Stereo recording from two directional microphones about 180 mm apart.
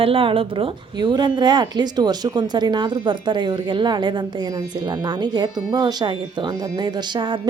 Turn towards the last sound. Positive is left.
turn(degrees=-25)  # may be behind; listen again after turning